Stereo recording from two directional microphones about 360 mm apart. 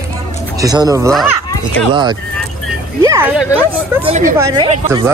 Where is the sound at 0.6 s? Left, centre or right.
Centre.